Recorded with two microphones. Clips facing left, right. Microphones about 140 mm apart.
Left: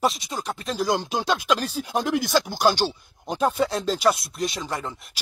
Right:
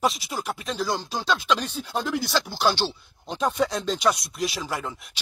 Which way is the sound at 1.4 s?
10° left (ahead or behind).